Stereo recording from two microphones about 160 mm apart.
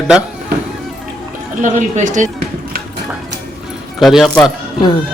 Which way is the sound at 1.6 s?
50° right (ahead or behind).